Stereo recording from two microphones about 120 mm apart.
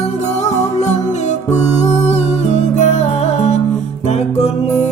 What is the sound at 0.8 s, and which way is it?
Music, 75° left (ahead or behind).